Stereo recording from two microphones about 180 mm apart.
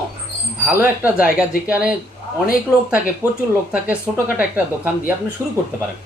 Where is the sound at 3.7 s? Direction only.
10° right (ahead or behind).